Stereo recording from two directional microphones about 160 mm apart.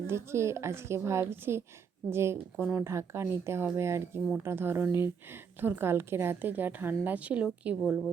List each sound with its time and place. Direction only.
0.1 s a woman's voice: 15° right (ahead or behind)